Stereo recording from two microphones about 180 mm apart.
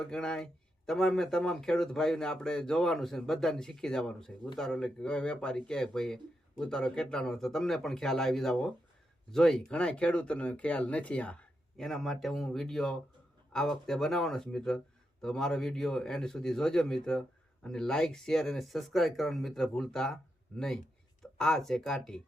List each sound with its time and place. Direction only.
0.0 s speech: 5° left (ahead or behind)